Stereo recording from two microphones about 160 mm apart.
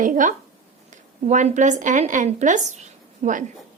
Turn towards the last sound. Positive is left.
turn(degrees=-50)  # may be behind; listen again after turning